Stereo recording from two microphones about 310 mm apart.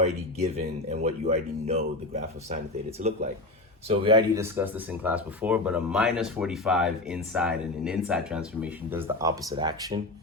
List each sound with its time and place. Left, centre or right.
0.0 s speech: centre
3.1 s speech: right